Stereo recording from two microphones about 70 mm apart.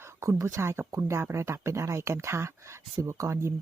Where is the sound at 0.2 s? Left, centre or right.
Right.